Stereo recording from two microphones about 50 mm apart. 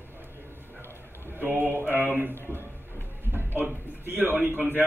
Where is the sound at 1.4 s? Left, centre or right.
Right.